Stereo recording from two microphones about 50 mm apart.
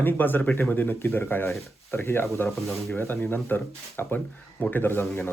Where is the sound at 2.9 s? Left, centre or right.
Left.